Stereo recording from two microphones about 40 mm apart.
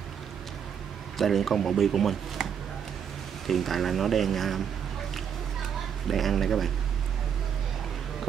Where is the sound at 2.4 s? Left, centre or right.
Centre.